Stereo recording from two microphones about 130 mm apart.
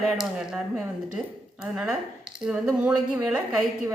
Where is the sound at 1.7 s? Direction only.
5° right (ahead or behind).